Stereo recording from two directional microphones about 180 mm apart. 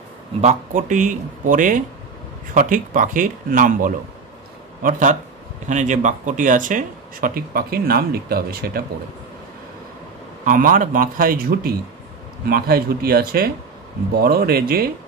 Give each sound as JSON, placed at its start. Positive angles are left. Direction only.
{"t": 0.4, "sound": "speech", "side_deg": -40}
{"t": 10.4, "sound": "speech", "side_deg": -50}